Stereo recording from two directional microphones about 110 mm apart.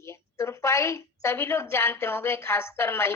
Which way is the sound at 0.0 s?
25° left (ahead or behind).